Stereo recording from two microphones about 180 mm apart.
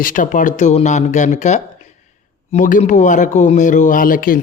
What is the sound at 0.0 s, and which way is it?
Speech, 50° left (ahead or behind).